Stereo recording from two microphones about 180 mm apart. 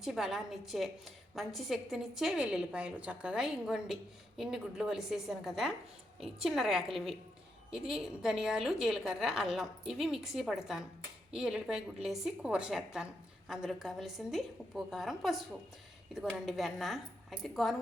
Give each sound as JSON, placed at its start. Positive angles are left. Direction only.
{"t": 0.0, "sound": "a woman's voice", "side_deg": 0}